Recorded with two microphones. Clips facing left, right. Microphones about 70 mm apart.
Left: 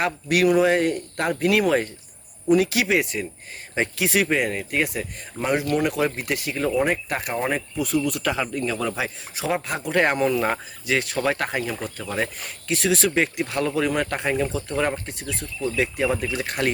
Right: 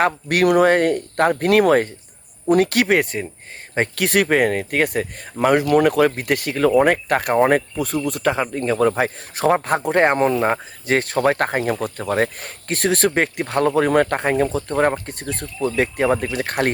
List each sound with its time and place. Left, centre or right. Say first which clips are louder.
0.0 s speech: right 3 dB; right
7.9 s a man's voice: right 3 dB; right
10.8 s speech: right 5 dB; right